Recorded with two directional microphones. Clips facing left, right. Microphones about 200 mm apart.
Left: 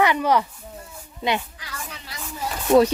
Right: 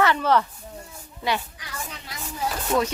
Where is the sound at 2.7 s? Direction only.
35° left (ahead or behind).